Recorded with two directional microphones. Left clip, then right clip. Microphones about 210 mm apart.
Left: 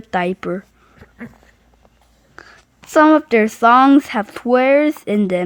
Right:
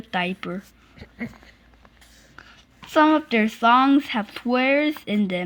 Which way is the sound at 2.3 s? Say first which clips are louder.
Left 7 dB; 55° left (ahead or behind).